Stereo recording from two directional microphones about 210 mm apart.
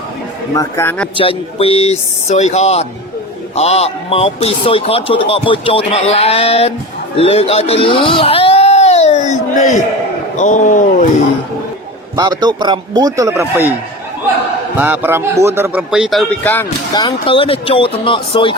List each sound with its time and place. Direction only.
0.5 s a man's voice: 15° left (ahead or behind)
1.1 s a man's voice: 25° left (ahead or behind)
7.2 s a sound: 30° left (ahead or behind)
10.3 s speech: 35° left (ahead or behind)
12.1 s a man's voice: 20° right (ahead or behind)
14.8 s speech: 10° right (ahead or behind); by 16.6 s 10° left (ahead or behind)
16.9 s a man's voice: 20° left (ahead or behind)